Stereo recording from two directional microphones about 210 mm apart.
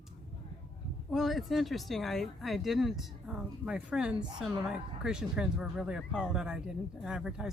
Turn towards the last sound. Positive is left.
turn(degrees=-5)  # may be behind; listen again after turning